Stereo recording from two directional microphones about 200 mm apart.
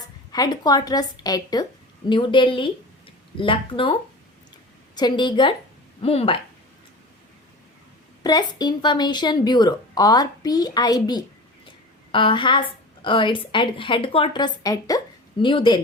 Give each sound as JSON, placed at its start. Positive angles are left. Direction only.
{"t": 0.3, "sound": "a woman's voice", "side_deg": 20}
{"t": 4.9, "sound": "a woman's voice", "side_deg": 20}
{"t": 8.2, "sound": "a woman's voice", "side_deg": 20}